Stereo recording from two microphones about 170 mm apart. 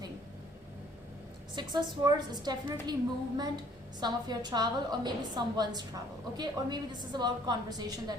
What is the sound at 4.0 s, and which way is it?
A woman's voice, 25° right (ahead or behind).